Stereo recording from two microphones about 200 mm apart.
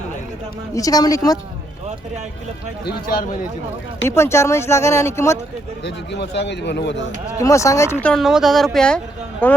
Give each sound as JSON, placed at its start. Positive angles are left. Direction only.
{"t": 0.7, "sound": "speech", "side_deg": 15}
{"t": 2.8, "sound": "a man's voice", "side_deg": 50}
{"t": 4.0, "sound": "speech", "side_deg": 15}
{"t": 5.8, "sound": "speech", "side_deg": 60}
{"t": 7.3, "sound": "speech", "side_deg": 15}
{"t": 8.0, "sound": "speech", "side_deg": 0}